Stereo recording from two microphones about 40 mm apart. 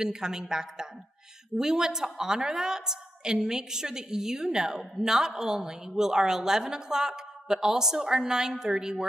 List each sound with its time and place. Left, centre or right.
0.0 s a woman's voice: centre